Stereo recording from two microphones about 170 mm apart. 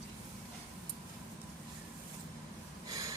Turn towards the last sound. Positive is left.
turn(degrees=-20)  # may be behind; listen again after turning